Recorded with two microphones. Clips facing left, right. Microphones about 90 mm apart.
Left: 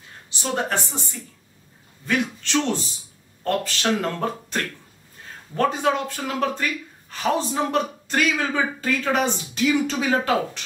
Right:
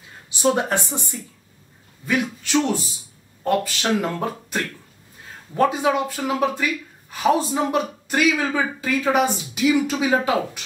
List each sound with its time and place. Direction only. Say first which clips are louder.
0.6 s speech: right 2 dB; 15° right (ahead or behind)
2.0 s speech: right 1 dB; 10° right (ahead or behind)